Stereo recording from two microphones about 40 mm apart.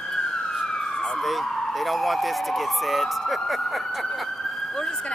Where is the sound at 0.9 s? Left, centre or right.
Centre.